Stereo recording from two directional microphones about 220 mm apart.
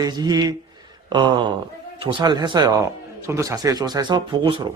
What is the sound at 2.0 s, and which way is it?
Speech, 20° right (ahead or behind).